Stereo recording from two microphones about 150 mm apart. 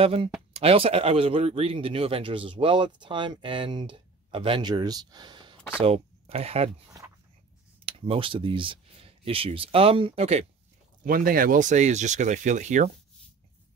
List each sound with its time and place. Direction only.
0.0 s speech: 40° right (ahead or behind)
7.8 s speech: 35° right (ahead or behind)
11.1 s speech: 70° right (ahead or behind); by 12.9 s 55° right (ahead or behind)